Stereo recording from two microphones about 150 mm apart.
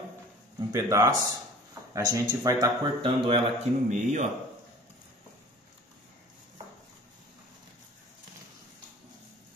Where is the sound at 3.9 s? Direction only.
50° right (ahead or behind).